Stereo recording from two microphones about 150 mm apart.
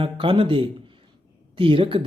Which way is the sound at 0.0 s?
35° right (ahead or behind).